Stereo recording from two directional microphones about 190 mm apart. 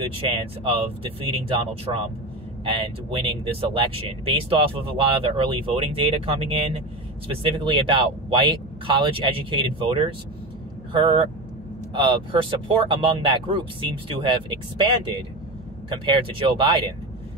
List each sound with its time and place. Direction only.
0.0 s speech: 30° right (ahead or behind)
15.9 s speech: 25° right (ahead or behind)